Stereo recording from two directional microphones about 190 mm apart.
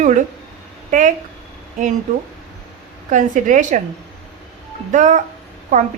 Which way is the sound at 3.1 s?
40° right (ahead or behind).